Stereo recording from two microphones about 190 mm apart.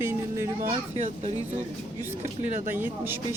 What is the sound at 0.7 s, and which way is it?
Speech, 35° right (ahead or behind).